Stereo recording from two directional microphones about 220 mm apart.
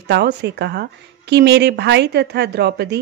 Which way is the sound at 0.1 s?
50° right (ahead or behind).